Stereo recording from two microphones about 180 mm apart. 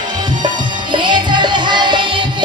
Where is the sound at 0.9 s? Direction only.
25° right (ahead or behind).